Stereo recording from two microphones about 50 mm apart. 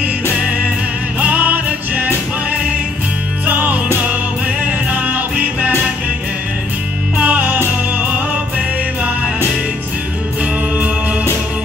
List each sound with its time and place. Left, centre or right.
1.2 s music: right
7.2 s music: right